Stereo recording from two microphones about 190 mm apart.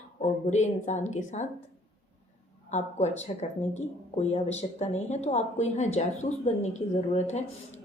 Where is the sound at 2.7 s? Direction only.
35° left (ahead or behind).